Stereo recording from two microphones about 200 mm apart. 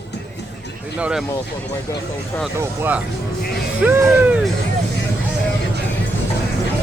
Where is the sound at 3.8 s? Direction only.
10° right (ahead or behind).